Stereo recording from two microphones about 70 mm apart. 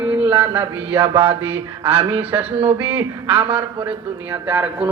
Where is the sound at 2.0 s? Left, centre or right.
Right.